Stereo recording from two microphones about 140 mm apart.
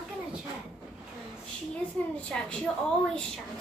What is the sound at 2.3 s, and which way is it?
Speech, 5° left (ahead or behind).